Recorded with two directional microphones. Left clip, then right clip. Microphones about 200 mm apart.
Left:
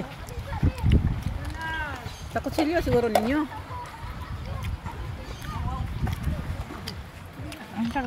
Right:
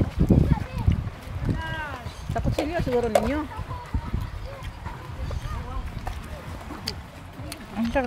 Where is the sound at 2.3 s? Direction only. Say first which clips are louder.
Left 2 dB; 55° left (ahead or behind).